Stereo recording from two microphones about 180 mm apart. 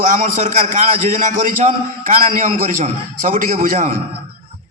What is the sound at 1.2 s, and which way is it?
A man's voice, 45° right (ahead or behind).